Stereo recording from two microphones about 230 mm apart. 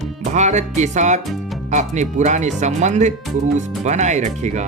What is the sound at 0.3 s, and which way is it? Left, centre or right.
Speech, right.